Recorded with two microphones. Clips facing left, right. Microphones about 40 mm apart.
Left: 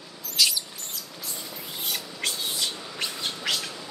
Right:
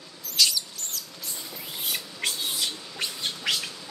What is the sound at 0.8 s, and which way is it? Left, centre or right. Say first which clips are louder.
Mouse: right 1 dB; centre.